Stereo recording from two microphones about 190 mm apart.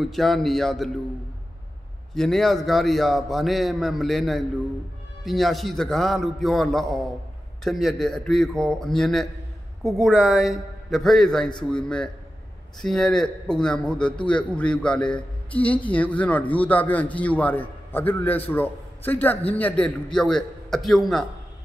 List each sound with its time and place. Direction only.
0.0 s a man's voice: centre (ahead or behind)
2.1 s a man's voice: centre (ahead or behind)